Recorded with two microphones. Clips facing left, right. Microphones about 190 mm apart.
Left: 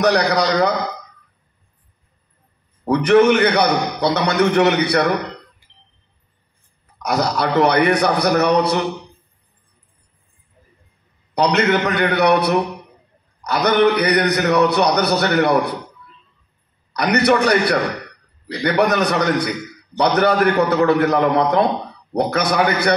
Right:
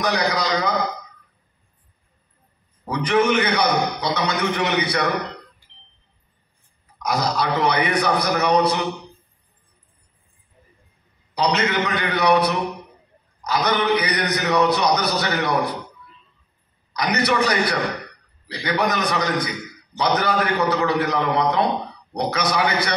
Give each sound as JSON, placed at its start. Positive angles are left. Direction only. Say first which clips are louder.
{"t": 0.0, "sound": "a man's voice", "louder": "left 6 dB", "side_deg": 65}
{"t": 2.8, "sound": "a man's voice", "louder": "left 7 dB", "side_deg": 65}
{"t": 7.0, "sound": "a man's voice", "louder": "left 3 dB", "side_deg": 65}
{"t": 11.3, "sound": "a man's voice", "louder": "left 5 dB", "side_deg": 65}
{"t": 16.9, "sound": "a man's voice", "louder": "left 6 dB", "side_deg": 60}